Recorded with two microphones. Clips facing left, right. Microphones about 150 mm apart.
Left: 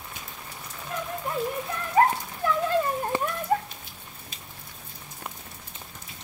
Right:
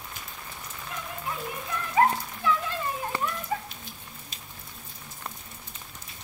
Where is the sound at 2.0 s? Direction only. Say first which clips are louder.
Left 2 dB; 45° left (ahead or behind).